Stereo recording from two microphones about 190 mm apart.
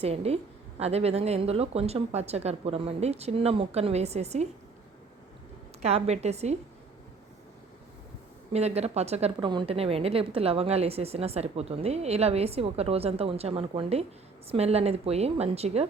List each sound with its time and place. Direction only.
0.0 s a woman's voice: 35° right (ahead or behind)
5.8 s a woman's voice: 35° right (ahead or behind)
8.5 s a woman's voice: 35° right (ahead or behind)